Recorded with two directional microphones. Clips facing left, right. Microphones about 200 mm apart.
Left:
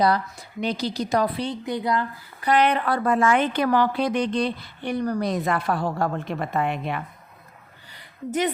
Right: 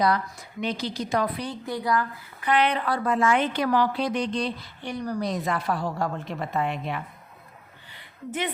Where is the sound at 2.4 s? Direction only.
45° left (ahead or behind).